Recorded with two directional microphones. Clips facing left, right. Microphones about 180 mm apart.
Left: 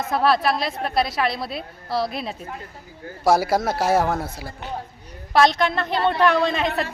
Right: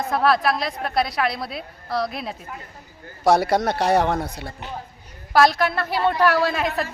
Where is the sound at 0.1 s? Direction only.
Centre (ahead or behind).